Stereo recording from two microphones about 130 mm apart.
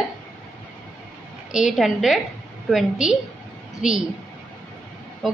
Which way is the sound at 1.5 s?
5° right (ahead or behind).